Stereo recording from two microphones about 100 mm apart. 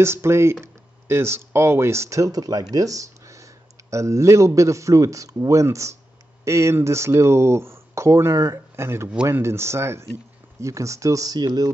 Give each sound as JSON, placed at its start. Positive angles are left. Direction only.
{"t": 0.0, "sound": "speech", "side_deg": -25}
{"t": 2.7, "sound": "a sound", "side_deg": -35}
{"t": 3.9, "sound": "a man's voice", "side_deg": -30}